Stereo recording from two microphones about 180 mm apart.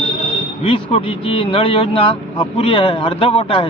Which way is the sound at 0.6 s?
30° left (ahead or behind).